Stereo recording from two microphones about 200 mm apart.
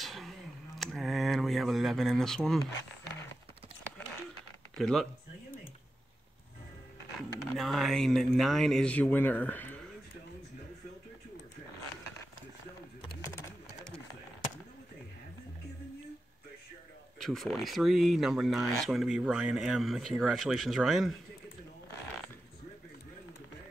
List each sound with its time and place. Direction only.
0.0 s a sound: centre (ahead or behind)
4.7 s speech: centre (ahead or behind)
7.2 s speech: centre (ahead or behind)
13.0 s bird: 25° left (ahead or behind)
17.2 s speech: centre (ahead or behind)